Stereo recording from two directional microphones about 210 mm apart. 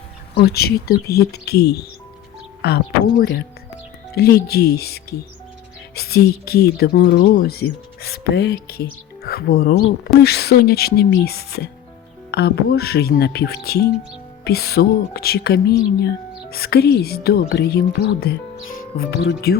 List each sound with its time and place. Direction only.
0.3 s speech: 50° left (ahead or behind)